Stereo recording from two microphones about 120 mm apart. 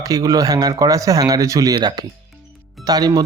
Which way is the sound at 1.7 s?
40° right (ahead or behind).